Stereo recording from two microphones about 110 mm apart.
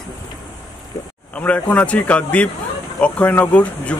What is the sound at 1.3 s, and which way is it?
Speech, 15° left (ahead or behind).